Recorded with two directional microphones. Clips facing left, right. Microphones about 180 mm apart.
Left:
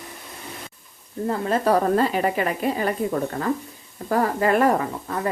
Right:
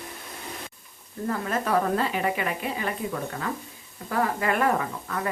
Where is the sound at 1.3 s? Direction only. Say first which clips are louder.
Left 5 dB; 35° left (ahead or behind).